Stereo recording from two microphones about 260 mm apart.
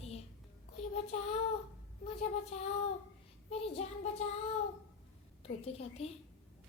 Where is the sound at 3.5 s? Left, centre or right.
Left.